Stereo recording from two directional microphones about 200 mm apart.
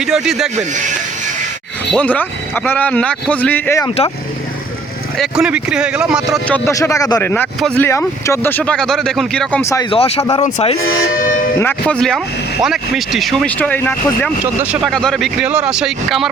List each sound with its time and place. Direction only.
0.0 s speech: centre (ahead or behind)
1.9 s speech: 5° left (ahead or behind)
3.8 s speech: 30° left (ahead or behind)
5.1 s speech: centre (ahead or behind)
6.7 s speech: 15° left (ahead or behind)
9.9 s speech: 30° left (ahead or behind)
10.8 s speech: 50° left (ahead or behind)
11.6 s speech: 5° left (ahead or behind)
14.6 s speech: 5° right (ahead or behind)